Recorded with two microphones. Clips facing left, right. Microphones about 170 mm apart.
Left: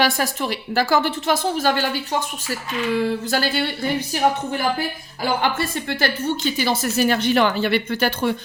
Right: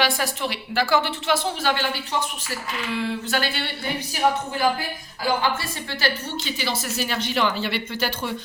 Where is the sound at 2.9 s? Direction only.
40° left (ahead or behind).